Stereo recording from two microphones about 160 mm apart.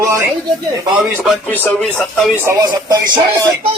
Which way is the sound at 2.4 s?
20° right (ahead or behind).